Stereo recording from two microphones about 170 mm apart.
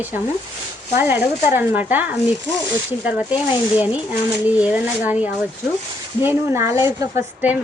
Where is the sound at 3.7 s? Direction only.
10° right (ahead or behind).